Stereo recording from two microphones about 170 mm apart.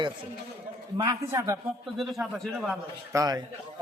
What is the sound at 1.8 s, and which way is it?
Speech, centre (ahead or behind).